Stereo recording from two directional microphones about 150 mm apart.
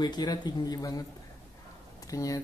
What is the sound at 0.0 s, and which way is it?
Speech, 25° left (ahead or behind).